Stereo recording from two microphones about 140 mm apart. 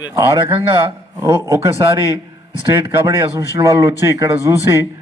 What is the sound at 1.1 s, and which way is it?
Speech, 25° right (ahead or behind).